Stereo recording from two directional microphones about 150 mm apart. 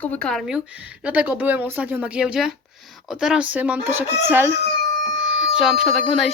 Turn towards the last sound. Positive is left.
turn(degrees=0)  # may be behind; listen again after turning